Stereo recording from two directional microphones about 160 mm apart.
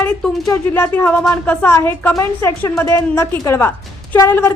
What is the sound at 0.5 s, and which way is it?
A woman's voice, 15° left (ahead or behind).